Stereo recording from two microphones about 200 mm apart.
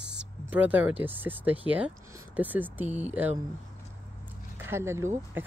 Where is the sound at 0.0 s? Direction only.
5° right (ahead or behind).